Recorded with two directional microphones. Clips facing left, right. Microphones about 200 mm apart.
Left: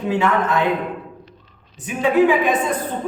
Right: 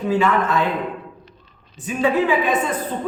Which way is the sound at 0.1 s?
15° left (ahead or behind).